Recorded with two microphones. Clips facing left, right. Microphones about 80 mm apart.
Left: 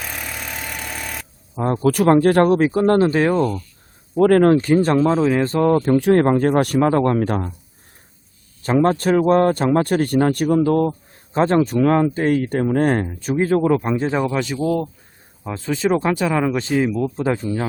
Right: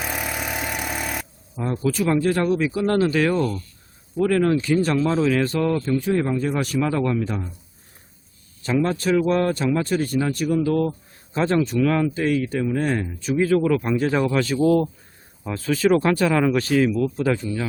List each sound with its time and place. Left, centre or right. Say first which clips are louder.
0.0 s vehicle: right 3 dB; centre
1.7 s speech: left 7 dB; left
4.1 s speech: left 6 dB; left
5.8 s speech: left 7 dB; left
8.6 s speech: left 5 dB; left
13.3 s speech: left 2 dB; left; by 14.6 s centre
14.6 s speech: right 4 dB; centre
15.4 s speech: right 1 dB; left
16.6 s speech: even; left